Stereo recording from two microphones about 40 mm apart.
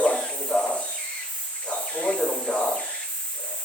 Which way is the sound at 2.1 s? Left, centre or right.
Centre.